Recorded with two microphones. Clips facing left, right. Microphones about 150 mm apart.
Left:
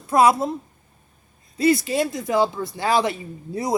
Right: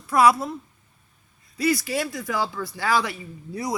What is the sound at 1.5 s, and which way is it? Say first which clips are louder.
Speech: left 5 dB; 25° left (ahead or behind).